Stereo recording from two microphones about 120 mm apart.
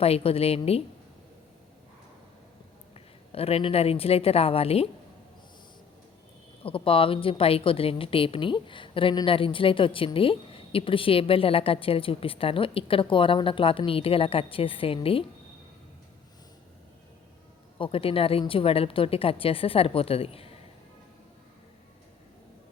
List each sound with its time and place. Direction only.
0.0 s a woman's voice: 55° left (ahead or behind)
2.9 s a woman's voice: 55° left (ahead or behind)
6.6 s a woman's voice: 50° left (ahead or behind)
17.7 s a woman's voice: 50° left (ahead or behind)